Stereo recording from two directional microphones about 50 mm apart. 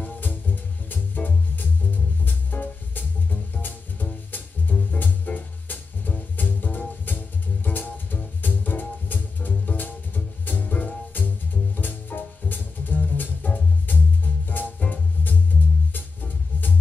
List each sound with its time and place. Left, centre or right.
0.0 s music: left